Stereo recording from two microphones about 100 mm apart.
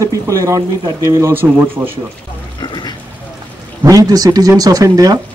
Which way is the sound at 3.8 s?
35° right (ahead or behind).